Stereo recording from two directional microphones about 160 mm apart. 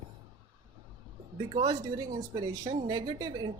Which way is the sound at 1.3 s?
30° right (ahead or behind).